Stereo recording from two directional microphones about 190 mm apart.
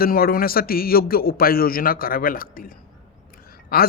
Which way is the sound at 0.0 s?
50° left (ahead or behind).